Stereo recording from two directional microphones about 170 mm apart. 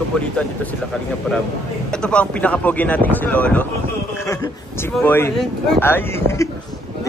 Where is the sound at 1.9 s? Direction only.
5° left (ahead or behind).